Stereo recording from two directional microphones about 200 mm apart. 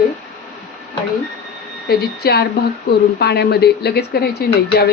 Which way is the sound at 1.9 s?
50° left (ahead or behind).